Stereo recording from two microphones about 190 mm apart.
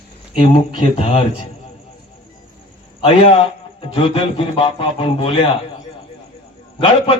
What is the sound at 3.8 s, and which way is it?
A man's voice, 30° left (ahead or behind).